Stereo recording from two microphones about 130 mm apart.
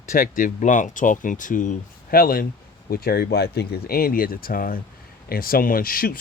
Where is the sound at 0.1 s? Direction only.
90° left.